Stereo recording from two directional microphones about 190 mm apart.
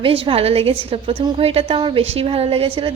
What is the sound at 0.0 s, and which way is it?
A woman's voice, 30° right (ahead or behind).